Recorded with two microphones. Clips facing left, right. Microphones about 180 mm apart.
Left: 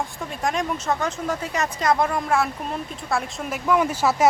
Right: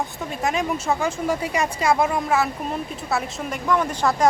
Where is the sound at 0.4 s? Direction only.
5° right (ahead or behind).